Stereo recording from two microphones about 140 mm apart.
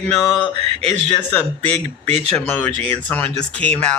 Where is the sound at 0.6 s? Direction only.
45° right (ahead or behind).